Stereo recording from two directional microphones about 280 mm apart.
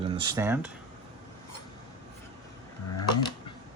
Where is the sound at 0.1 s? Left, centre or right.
Centre.